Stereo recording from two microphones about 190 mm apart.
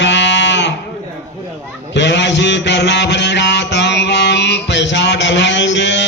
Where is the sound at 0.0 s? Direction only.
70° left (ahead or behind).